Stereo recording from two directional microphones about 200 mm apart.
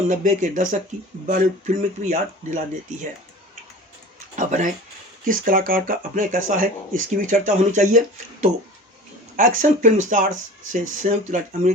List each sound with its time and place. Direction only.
0.1 s speech: 40° right (ahead or behind)
4.4 s speech: 40° right (ahead or behind)
9.6 s speech: 40° right (ahead or behind)